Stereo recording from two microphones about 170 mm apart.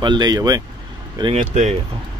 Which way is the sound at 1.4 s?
45° right (ahead or behind).